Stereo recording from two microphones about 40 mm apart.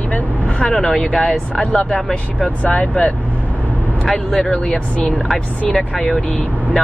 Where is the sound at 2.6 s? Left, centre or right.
Left.